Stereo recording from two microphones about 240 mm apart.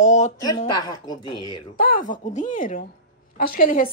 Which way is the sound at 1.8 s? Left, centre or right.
Left.